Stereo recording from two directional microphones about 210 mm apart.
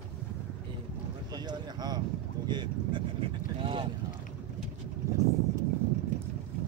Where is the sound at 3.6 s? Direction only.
25° right (ahead or behind).